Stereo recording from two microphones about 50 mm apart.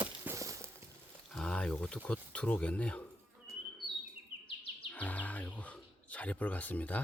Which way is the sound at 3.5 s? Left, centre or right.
Right.